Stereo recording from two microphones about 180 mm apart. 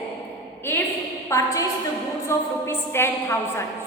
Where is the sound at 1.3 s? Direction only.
15° left (ahead or behind).